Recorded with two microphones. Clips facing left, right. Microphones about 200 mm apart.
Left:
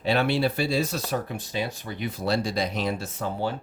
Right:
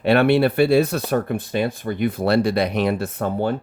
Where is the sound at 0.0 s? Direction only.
60° right (ahead or behind).